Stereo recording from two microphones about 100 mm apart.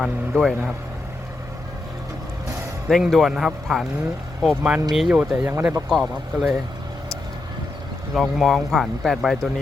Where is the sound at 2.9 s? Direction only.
5° left (ahead or behind).